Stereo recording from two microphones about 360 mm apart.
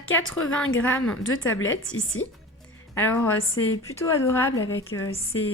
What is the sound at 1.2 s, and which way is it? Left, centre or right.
A woman's voice, left.